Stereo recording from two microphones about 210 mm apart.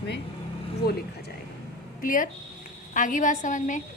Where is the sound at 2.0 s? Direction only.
40° left (ahead or behind).